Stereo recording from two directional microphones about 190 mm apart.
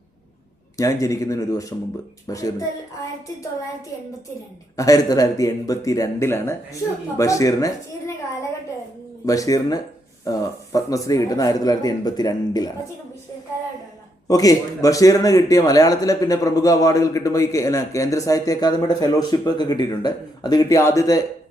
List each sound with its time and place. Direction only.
0.8 s a man's voice: 15° left (ahead or behind)
4.8 s a man's voice: 20° left (ahead or behind)
9.2 s a man's voice: 20° left (ahead or behind)
14.3 s a man's voice: 20° left (ahead or behind)